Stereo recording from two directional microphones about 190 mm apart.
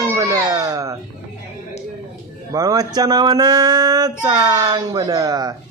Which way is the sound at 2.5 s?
20° right (ahead or behind).